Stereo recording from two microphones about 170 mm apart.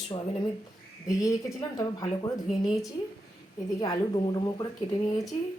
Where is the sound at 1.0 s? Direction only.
20° left (ahead or behind).